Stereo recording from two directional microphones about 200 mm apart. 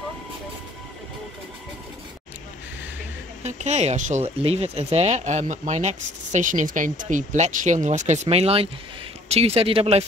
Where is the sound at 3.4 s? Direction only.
35° right (ahead or behind).